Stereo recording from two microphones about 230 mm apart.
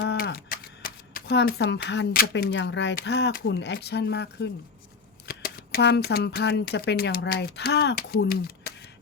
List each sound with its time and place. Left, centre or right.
0.0 s speech: left